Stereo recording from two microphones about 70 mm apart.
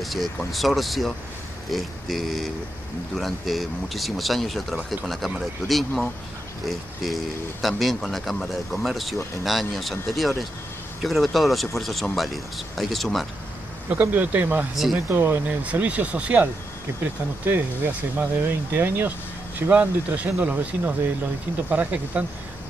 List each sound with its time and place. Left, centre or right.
0.0 s speech: centre
13.8 s speech: right
15.6 s speech: centre
17.5 s speech: right